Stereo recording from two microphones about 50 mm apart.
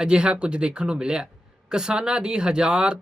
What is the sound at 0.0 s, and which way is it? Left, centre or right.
Speech, centre.